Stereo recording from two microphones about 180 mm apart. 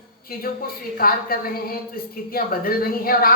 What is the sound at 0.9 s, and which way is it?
Speech, 55° left (ahead or behind).